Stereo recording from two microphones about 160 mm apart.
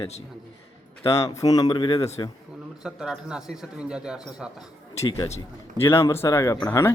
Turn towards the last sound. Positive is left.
turn(degrees=15)  # may be behind; listen again after turning